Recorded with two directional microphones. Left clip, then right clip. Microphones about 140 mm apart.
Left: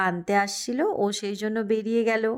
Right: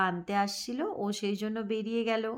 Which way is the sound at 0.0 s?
35° left (ahead or behind).